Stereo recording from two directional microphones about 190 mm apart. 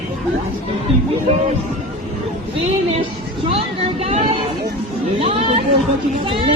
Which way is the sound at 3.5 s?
30° right (ahead or behind).